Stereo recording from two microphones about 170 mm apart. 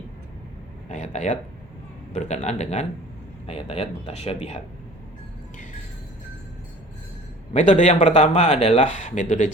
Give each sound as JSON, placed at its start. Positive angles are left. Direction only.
{"t": 0.9, "sound": "a man's voice", "side_deg": 45}
{"t": 7.5, "sound": "speech", "side_deg": 45}